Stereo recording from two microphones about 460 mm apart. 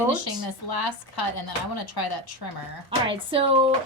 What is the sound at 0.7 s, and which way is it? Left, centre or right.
Speech, left.